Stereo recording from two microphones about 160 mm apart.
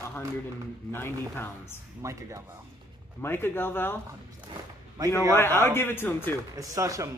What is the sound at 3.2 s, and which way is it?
Speech, 15° left (ahead or behind).